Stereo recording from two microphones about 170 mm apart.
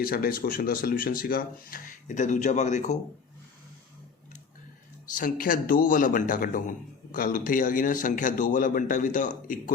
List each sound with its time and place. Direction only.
0.0 s speech: 60° left (ahead or behind); by 3.0 s 45° left (ahead or behind)
5.1 s a man's voice: 55° left (ahead or behind)